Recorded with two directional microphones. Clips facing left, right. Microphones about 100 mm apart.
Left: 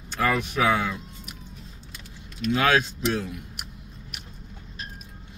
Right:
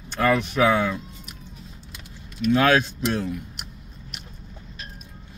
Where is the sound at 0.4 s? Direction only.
10° left (ahead or behind).